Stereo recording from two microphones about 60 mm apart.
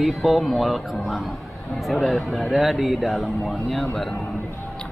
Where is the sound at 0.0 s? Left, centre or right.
Centre.